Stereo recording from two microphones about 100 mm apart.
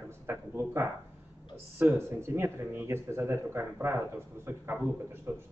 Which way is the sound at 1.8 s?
20° right (ahead or behind).